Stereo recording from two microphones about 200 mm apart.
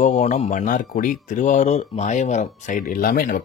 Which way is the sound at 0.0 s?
35° left (ahead or behind).